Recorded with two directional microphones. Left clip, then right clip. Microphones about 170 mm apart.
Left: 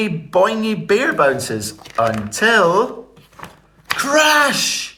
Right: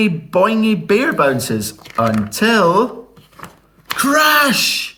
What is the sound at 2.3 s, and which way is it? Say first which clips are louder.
Speech: even; 45° left (ahead or behind).